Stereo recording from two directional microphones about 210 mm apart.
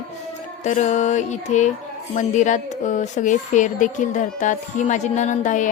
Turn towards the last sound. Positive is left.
turn(degrees=35)  # may be behind; listen again after turning